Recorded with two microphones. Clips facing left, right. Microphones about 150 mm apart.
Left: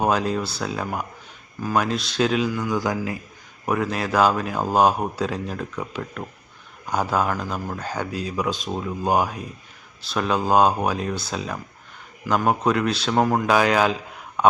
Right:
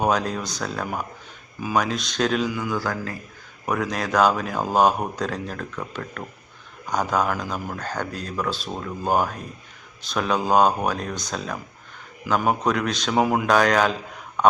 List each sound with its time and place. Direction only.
0.0 s speech: 5° left (ahead or behind)
2.7 s speech: 15° left (ahead or behind)
3.7 s speech: 5° left (ahead or behind)
13.5 s speech: 5° left (ahead or behind)
14.4 s a sound: 5° left (ahead or behind)